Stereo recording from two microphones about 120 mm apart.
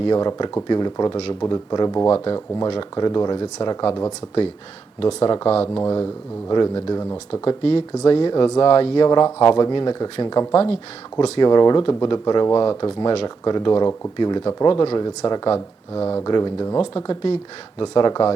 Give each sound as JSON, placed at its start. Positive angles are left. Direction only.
{"t": 0.0, "sound": "speech", "side_deg": 35}
{"t": 2.0, "sound": "speech", "side_deg": 20}
{"t": 2.2, "sound": "speech", "side_deg": 40}
{"t": 4.9, "sound": "speech", "side_deg": 50}
{"t": 5.7, "sound": "speech", "side_deg": 20}
{"t": 6.5, "sound": "speech", "side_deg": 40}
{"t": 7.4, "sound": "speech", "side_deg": 50}
{"t": 10.5, "sound": "speech", "side_deg": 55}
{"t": 11.3, "sound": "speech", "side_deg": 40}
{"t": 15.5, "sound": "speech", "side_deg": 20}
{"t": 16.2, "sound": "speech", "side_deg": 35}
{"t": 17.8, "sound": "speech", "side_deg": 40}